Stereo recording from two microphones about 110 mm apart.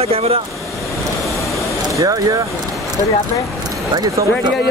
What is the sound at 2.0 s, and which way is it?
Speech, 30° right (ahead or behind).